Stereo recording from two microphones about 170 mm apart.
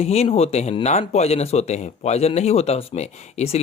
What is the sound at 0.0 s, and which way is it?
Speech, 35° left (ahead or behind).